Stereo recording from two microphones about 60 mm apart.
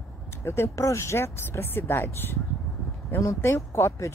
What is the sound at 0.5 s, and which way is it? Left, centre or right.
Speech, left.